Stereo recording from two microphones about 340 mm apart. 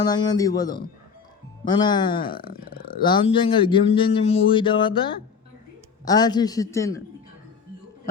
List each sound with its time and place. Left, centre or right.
0.0 s speech: centre
2.2 s speech: left
3.0 s speech: centre